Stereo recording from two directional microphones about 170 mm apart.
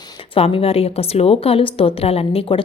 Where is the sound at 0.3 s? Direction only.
35° left (ahead or behind).